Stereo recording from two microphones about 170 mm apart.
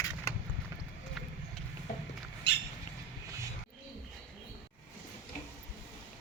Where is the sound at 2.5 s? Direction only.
85° left.